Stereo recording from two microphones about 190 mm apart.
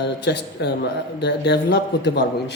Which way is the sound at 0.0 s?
60° left (ahead or behind).